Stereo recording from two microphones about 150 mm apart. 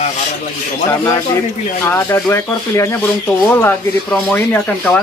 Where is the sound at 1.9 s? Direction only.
15° left (ahead or behind).